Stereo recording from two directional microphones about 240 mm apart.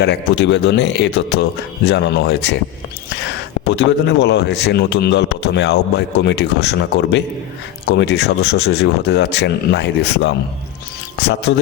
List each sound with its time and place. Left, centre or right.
0.0 s speech: left
3.8 s speech: left